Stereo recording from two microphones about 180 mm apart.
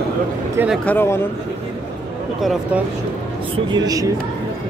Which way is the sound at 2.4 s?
Centre (ahead or behind).